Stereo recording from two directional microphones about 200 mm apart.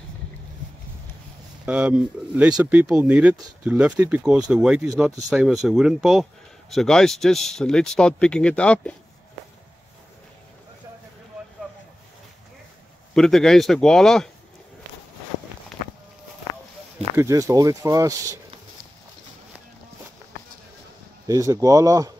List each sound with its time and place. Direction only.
1.7 s speech: 5° right (ahead or behind)
13.1 s speech: centre (ahead or behind)
17.2 s speech: 15° right (ahead or behind)
21.3 s speech: 15° right (ahead or behind)